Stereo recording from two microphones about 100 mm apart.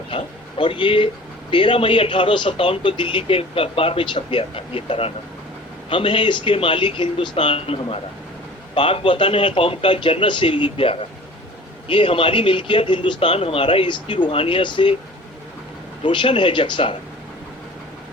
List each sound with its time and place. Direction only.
0.1 s speech: 60° left (ahead or behind)
5.9 s speech: 60° left (ahead or behind)
16.0 s speech: 60° left (ahead or behind)